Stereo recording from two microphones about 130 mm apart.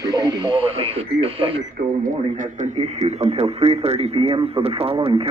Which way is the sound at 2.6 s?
60° right (ahead or behind).